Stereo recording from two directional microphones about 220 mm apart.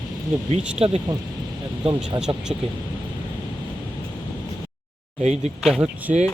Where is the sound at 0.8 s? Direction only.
25° right (ahead or behind).